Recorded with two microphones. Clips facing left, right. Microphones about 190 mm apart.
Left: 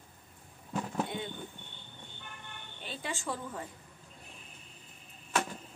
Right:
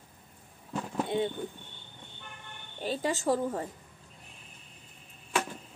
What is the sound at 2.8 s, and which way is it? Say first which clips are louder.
Speech: right 9 dB; 40° right (ahead or behind).